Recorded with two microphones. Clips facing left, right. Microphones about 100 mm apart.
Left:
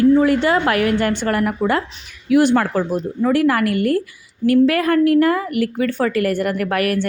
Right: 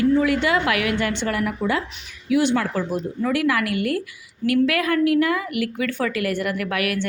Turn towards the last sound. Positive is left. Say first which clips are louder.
# left 5 dB
turn(degrees=40)  # may be behind; listen again after turning